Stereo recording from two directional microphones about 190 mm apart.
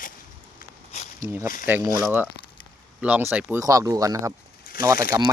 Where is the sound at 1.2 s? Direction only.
15° right (ahead or behind).